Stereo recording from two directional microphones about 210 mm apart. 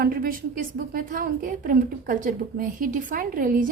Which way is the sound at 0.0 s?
45° right (ahead or behind).